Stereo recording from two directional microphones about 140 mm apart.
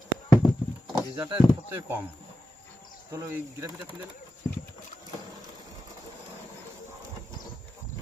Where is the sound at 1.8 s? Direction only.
15° right (ahead or behind).